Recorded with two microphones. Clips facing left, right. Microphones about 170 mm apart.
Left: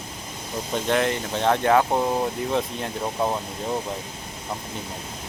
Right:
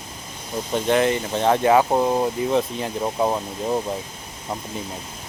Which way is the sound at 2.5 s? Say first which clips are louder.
Right 4 dB; centre (ahead or behind).